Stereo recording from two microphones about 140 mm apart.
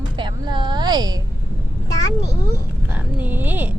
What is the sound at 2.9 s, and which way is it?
Speech, 10° right (ahead or behind).